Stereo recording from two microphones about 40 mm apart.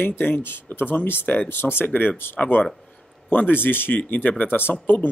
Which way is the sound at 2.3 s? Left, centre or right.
Left.